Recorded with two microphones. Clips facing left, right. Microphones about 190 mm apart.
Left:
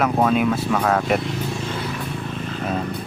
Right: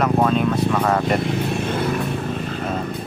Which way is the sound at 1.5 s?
55° right (ahead or behind).